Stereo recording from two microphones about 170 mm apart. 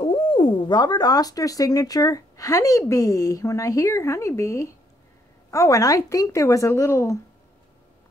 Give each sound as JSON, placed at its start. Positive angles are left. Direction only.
{"t": 0.0, "sound": "speech", "side_deg": 30}